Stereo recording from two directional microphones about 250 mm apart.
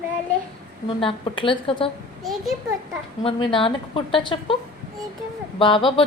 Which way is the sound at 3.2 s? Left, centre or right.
Left.